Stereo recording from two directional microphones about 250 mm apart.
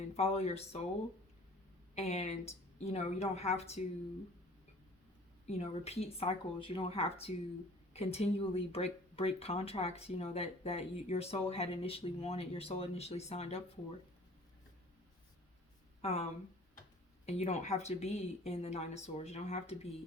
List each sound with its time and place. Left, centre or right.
0.2 s speech: left
2.0 s speech: left
5.5 s speech: left
16.0 s speech: left
17.2 s speech: left